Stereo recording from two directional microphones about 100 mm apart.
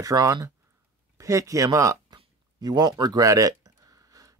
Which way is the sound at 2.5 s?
40° right (ahead or behind).